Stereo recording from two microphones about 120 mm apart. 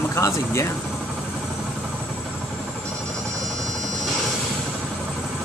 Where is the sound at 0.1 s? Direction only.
25° left (ahead or behind).